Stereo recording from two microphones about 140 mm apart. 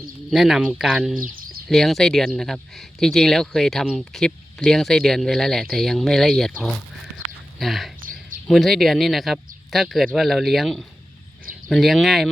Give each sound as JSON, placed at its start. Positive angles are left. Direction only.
{"t": 0.3, "sound": "speech", "side_deg": 0}
{"t": 1.2, "sound": "bird", "side_deg": -90}
{"t": 1.7, "sound": "speech", "side_deg": 0}